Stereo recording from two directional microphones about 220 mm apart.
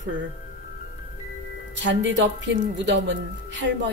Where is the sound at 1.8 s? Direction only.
55° right (ahead or behind).